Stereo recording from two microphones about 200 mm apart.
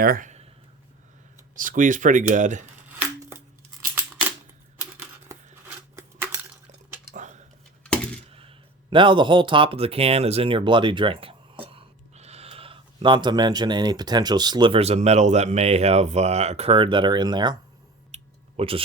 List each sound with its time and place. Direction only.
0.0 s speech: 45° right (ahead or behind)
1.5 s speech: 40° right (ahead or behind)
4.8 s typewriter: 15° right (ahead or behind)
6.0 s cutlery: 15° right (ahead or behind)
7.1 s a sound: 35° right (ahead or behind)
8.3 s speech: 25° right (ahead or behind)
18.1 s a sound: 30° right (ahead or behind)